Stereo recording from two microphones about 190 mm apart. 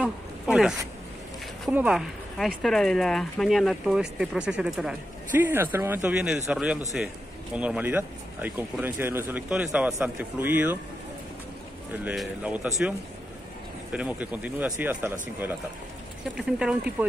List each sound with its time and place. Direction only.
0.0 s a sound: centre (ahead or behind)
1.7 s speech: 5° right (ahead or behind)
12.0 s speech: 5° right (ahead or behind)
13.9 s speech: 5° right (ahead or behind)